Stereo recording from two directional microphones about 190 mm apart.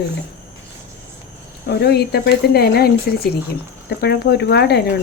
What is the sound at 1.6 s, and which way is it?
Speech, 60° left (ahead or behind).